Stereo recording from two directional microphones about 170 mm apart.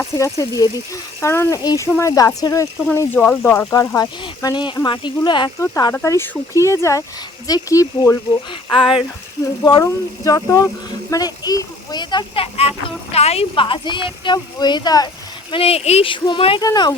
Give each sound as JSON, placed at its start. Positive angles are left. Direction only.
{"t": 0.0, "sound": "speech", "side_deg": 20}
{"t": 9.6, "sound": "speech", "side_deg": 20}
{"t": 15.5, "sound": "speech", "side_deg": 35}